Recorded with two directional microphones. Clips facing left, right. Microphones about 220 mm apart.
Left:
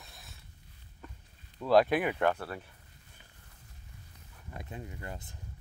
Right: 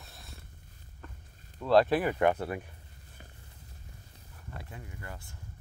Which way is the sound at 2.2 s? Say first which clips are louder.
Right 3 dB; 15° right (ahead or behind).